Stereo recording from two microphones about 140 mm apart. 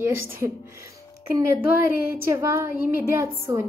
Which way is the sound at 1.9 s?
20° right (ahead or behind).